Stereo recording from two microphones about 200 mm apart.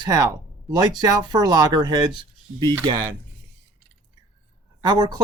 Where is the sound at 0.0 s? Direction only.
15° right (ahead or behind).